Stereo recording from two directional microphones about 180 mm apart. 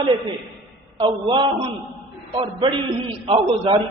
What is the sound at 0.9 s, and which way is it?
A man's voice, 25° right (ahead or behind).